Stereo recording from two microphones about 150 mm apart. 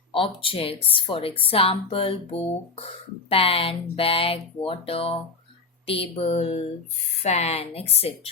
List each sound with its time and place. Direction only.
0.1 s a woman's voice: 35° left (ahead or behind)